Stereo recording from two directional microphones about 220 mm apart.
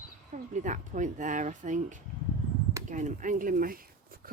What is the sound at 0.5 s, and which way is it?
Speech, 35° right (ahead or behind).